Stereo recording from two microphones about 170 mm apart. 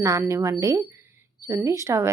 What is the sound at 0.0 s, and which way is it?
A woman's voice, 20° right (ahead or behind).